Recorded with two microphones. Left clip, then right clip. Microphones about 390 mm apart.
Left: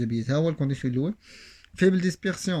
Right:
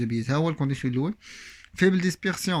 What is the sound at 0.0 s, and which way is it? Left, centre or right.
Speech, centre.